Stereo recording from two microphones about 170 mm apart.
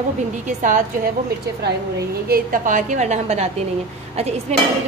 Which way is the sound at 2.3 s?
50° right (ahead or behind).